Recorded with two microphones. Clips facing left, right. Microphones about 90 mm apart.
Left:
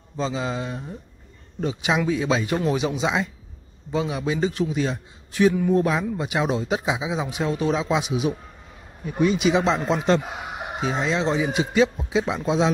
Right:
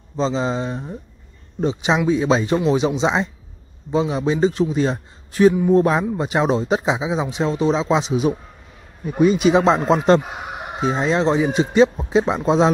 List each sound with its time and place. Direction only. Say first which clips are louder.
0.2 s a man's voice: right 5 dB; 30° right (ahead or behind)
5.5 s a man's voice: right 5 dB; 25° right (ahead or behind)